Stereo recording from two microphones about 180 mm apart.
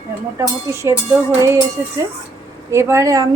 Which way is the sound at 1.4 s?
15° right (ahead or behind).